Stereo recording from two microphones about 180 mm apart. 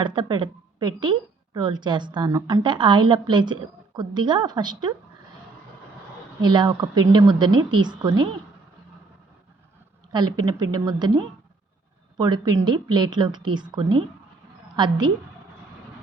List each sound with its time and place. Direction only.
0.0 s a woman's voice: 25° right (ahead or behind)
6.4 s a woman's voice: 25° right (ahead or behind)
10.1 s a woman's voice: 20° right (ahead or behind)